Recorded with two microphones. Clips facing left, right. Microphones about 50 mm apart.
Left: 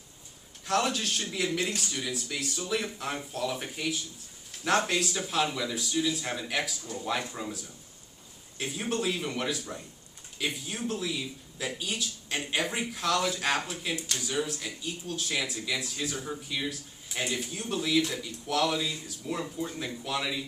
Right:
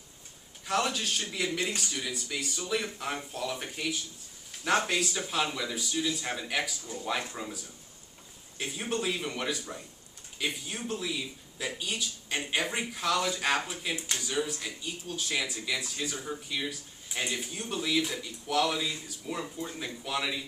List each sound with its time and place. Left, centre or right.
0.7 s speech: centre
13.9 s speech: right
14.2 s speech: centre